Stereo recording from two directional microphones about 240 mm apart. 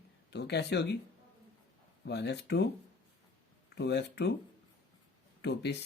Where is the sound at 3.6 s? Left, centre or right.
Left.